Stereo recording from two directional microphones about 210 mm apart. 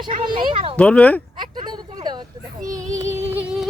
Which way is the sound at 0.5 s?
25° right (ahead or behind).